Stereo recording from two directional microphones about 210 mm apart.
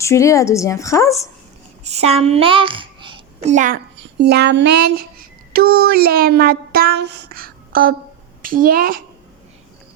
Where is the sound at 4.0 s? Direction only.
55° right (ahead or behind).